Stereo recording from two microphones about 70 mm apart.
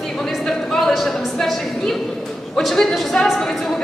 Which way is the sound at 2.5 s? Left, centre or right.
Centre.